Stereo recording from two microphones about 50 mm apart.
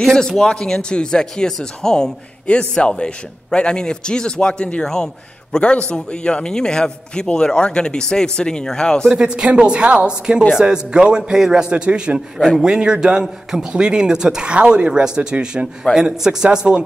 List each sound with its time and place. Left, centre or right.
0.0 s speech: centre
9.1 s a woman's voice: centre